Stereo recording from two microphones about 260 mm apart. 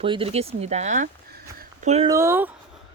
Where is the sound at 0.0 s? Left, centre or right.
Right.